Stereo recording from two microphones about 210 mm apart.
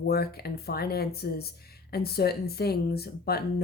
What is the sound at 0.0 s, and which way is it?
Speech, 50° left (ahead or behind).